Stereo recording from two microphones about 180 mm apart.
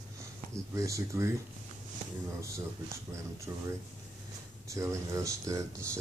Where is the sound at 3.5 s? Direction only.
15° right (ahead or behind).